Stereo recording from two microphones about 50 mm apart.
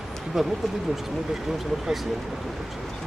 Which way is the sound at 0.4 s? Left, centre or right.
Centre.